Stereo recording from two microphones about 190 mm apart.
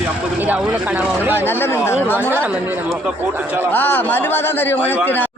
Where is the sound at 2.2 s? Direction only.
10° right (ahead or behind).